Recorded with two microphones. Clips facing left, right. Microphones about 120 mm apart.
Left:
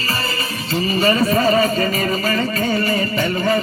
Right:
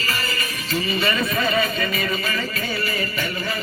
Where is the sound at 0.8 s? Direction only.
35° left (ahead or behind).